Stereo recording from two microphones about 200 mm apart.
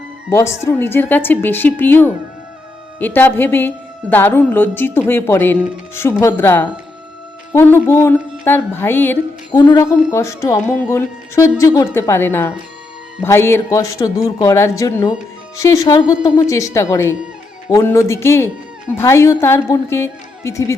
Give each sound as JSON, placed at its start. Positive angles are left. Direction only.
{"t": 0.3, "sound": "music", "side_deg": 15}